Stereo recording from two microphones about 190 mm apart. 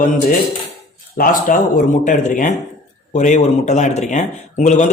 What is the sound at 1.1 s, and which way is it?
Speech, 45° left (ahead or behind).